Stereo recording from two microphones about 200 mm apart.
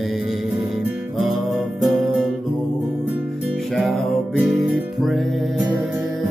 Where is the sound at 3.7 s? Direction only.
Centre (ahead or behind).